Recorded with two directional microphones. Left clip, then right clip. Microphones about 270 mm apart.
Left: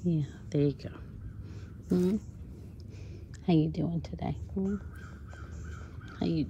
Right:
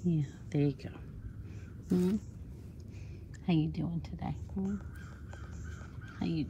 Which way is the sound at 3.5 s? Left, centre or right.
Left.